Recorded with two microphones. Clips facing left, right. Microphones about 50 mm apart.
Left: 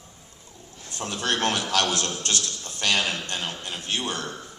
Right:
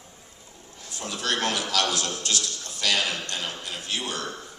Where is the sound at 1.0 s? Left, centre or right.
Left.